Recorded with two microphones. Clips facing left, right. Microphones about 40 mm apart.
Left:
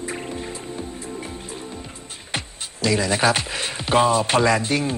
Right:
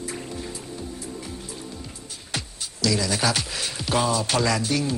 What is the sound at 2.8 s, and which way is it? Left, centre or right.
Speech, left.